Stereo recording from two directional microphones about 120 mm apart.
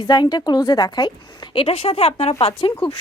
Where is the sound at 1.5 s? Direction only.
50° left (ahead or behind).